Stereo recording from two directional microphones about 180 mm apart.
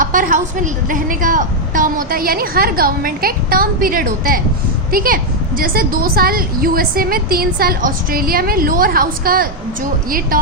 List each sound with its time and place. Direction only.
0.0 s a woman's voice: 45° right (ahead or behind)